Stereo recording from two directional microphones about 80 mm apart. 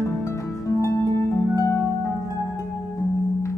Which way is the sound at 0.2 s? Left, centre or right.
Left.